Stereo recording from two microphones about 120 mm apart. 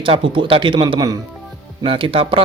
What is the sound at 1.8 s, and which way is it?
Speech, 45° right (ahead or behind).